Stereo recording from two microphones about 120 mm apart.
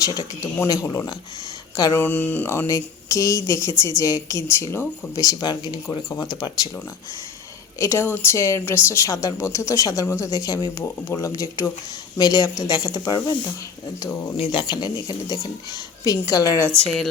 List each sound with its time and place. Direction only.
0.0 s a woman's voice: 30° left (ahead or behind)
1.9 s a woman's voice: 15° left (ahead or behind); by 6.7 s 35° left (ahead or behind)
7.8 s a woman's voice: 20° left (ahead or behind)
14.5 s speech: 40° left (ahead or behind)
16.8 s speech: centre (ahead or behind)